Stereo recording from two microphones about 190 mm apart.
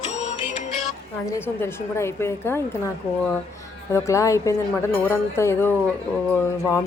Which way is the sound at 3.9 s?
15° left (ahead or behind).